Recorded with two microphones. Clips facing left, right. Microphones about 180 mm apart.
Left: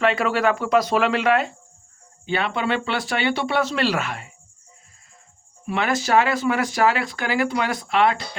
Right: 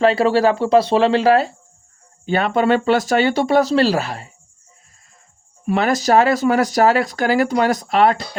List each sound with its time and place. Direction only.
0.0 s speech: 35° right (ahead or behind)
5.6 s speech: 40° right (ahead or behind)